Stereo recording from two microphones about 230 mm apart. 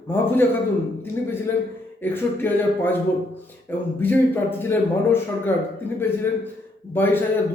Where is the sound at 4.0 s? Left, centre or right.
Centre.